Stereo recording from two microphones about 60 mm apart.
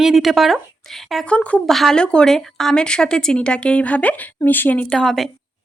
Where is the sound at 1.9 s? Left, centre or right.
Centre.